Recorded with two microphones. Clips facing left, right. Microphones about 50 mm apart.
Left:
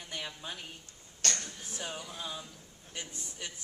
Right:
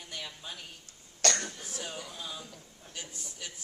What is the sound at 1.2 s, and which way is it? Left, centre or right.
Speech, right.